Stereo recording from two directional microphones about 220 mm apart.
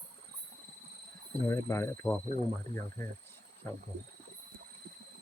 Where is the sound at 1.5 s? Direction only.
15° left (ahead or behind).